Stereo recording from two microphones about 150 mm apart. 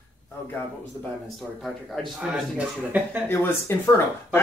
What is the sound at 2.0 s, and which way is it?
Speech, 5° left (ahead or behind).